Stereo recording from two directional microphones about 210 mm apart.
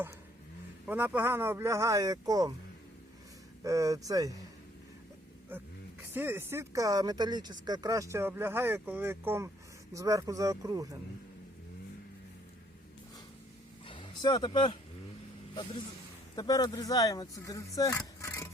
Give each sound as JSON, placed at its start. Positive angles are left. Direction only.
{"t": 0.9, "sound": "speech", "side_deg": -10}
{"t": 3.6, "sound": "speech", "side_deg": -15}
{"t": 6.1, "sound": "speech", "side_deg": -10}
{"t": 13.8, "sound": "a sound", "side_deg": 25}
{"t": 16.3, "sound": "speech", "side_deg": 20}